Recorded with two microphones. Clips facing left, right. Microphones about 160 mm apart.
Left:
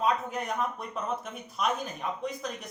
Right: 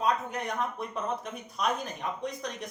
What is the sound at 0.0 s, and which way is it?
Speech, centre (ahead or behind).